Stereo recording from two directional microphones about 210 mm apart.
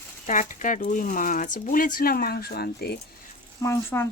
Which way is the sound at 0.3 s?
35° left (ahead or behind).